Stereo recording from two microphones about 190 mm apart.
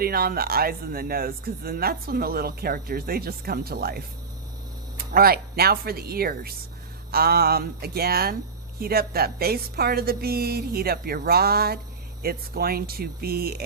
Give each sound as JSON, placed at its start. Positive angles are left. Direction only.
{"t": 0.0, "sound": "speech", "side_deg": -50}